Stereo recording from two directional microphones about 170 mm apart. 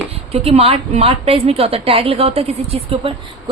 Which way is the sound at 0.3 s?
35° right (ahead or behind).